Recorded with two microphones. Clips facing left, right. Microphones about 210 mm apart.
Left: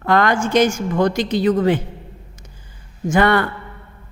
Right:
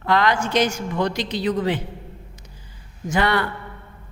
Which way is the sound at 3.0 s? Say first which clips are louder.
Left 5 dB; 50° left (ahead or behind).